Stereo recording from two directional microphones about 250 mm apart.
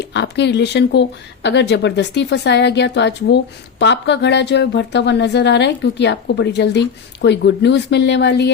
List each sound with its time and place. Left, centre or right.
0.0 s speech: left